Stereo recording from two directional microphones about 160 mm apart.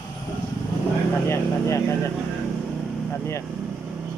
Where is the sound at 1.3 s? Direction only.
15° left (ahead or behind).